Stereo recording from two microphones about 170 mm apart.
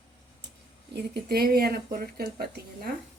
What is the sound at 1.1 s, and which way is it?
A woman's voice, 65° right (ahead or behind).